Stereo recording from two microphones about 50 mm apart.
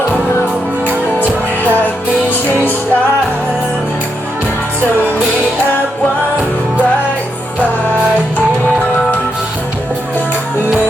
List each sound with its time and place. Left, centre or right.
2.3 s music: left